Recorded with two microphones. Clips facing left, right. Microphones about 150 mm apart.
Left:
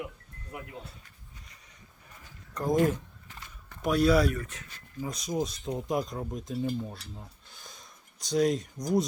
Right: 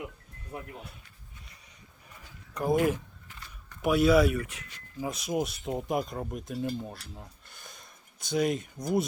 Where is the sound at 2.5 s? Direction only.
10° right (ahead or behind).